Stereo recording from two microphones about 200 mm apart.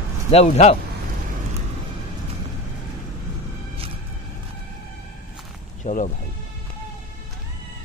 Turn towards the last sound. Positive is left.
turn(degrees=40)  # may be behind; listen again after turning